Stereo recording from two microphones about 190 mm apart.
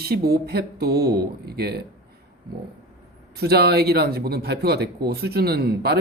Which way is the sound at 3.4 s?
55° right (ahead or behind).